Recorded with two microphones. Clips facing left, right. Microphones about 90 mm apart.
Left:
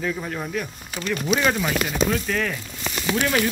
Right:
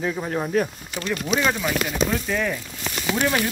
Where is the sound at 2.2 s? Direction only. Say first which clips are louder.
Right 1 dB; 15° right (ahead or behind).